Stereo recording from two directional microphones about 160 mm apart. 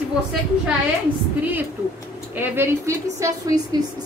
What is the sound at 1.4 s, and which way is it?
A woman's voice, 10° right (ahead or behind).